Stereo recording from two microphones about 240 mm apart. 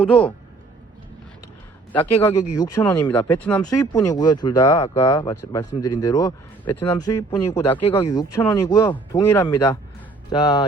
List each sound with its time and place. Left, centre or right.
0.1 s speech: centre
1.9 s speech: centre